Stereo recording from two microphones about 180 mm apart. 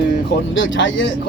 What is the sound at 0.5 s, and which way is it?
Speech, 90° left.